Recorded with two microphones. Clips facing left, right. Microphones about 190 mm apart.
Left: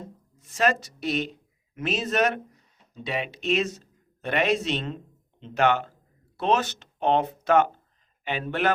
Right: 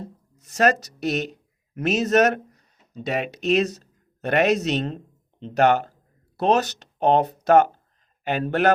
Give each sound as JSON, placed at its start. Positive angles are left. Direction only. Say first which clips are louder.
{"t": 0.0, "sound": "speech", "louder": "right 4 dB", "side_deg": -40}